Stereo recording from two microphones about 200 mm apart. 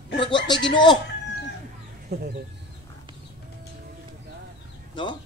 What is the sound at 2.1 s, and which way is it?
Speech, 55° right (ahead or behind).